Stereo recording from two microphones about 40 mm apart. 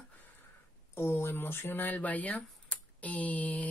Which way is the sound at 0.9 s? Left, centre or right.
Left.